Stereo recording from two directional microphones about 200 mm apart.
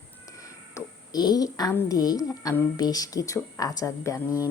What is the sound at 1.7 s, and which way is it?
A woman's voice, 15° left (ahead or behind).